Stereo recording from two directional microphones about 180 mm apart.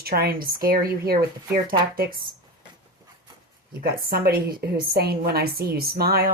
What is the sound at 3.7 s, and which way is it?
Speech, 55° right (ahead or behind).